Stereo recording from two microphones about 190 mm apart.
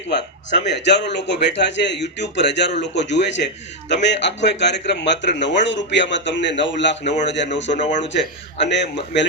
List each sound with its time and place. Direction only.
0.5 s a man's voice: 65° left (ahead or behind)
7.8 s speech: 40° left (ahead or behind)
8.6 s a man's voice: 70° left (ahead or behind)